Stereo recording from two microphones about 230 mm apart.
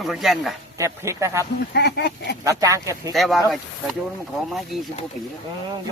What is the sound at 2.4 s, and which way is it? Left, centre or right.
Speech, centre.